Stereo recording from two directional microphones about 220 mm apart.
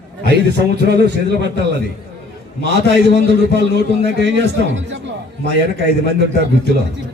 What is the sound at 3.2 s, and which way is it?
A man's voice, 50° right (ahead or behind).